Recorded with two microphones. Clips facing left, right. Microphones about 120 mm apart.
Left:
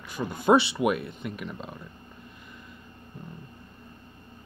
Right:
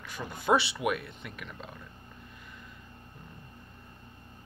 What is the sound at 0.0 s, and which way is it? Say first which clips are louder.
Speech: left 7 dB; 15° left (ahead or behind).